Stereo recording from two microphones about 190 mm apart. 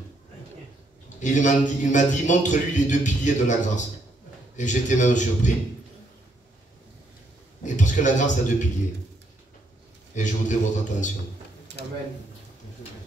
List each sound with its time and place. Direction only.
1.2 s a man's voice: 40° left (ahead or behind)
7.6 s a man's voice: 40° left (ahead or behind)
10.1 s a man's voice: 40° left (ahead or behind)